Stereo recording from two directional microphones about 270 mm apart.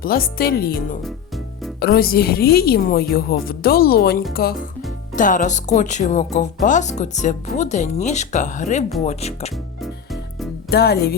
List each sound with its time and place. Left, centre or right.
0.0 s a woman's voice: left
10.7 s a woman's voice: left